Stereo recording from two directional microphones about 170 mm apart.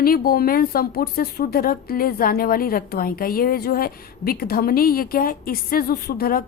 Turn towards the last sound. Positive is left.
turn(degrees=60)  # may be behind; listen again after turning